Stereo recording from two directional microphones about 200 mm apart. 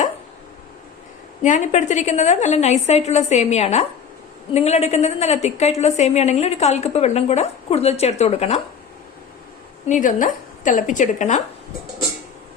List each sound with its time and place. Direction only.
1.4 s a woman's voice: 35° left (ahead or behind)
9.8 s a woman's voice: 40° left (ahead or behind)